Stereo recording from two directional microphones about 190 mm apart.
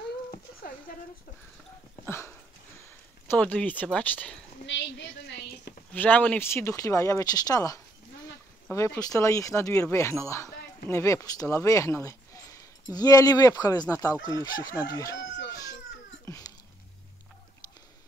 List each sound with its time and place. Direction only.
0.9 s a sound: 50° left (ahead or behind)
2.0 s dog: 10° left (ahead or behind)
3.3 s speech: 5° left (ahead or behind)
4.6 s a woman's voice: 70° left (ahead or behind)
5.9 s speech: 10° left (ahead or behind)